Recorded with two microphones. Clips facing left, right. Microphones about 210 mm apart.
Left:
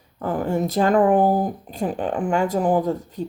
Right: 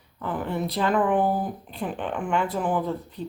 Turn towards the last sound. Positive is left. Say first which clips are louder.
# left 6 dB
turn(degrees=45)  # may be behind; listen again after turning